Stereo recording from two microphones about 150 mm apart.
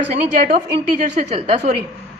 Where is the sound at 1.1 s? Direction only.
50° right (ahead or behind).